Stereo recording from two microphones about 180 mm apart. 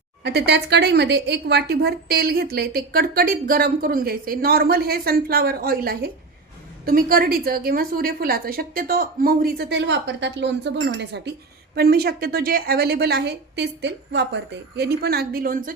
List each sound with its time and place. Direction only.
0.2 s a woman's voice: 70° right (ahead or behind); by 15.7 s 50° right (ahead or behind)